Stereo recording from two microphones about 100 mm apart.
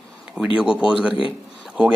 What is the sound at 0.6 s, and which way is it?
Speech, 10° right (ahead or behind).